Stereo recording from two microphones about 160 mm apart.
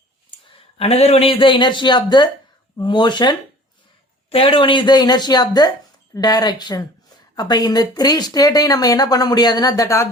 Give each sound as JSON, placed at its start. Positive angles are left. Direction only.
{"t": 0.4, "sound": "a man's voice", "side_deg": 35}